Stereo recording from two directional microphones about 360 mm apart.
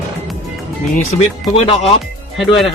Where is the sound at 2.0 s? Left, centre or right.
Centre.